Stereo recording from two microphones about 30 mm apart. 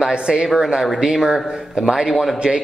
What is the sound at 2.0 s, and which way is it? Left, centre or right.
Speech, centre.